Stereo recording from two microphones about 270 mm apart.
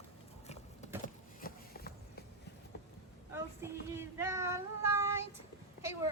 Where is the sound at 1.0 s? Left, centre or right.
Left.